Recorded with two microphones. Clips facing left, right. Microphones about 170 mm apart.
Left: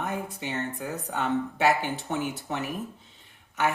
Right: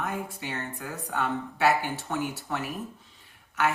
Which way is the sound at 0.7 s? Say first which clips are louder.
Left 1 dB; 20° left (ahead or behind).